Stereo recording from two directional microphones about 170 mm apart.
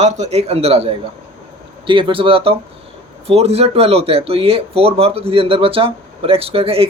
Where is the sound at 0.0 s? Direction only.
40° right (ahead or behind).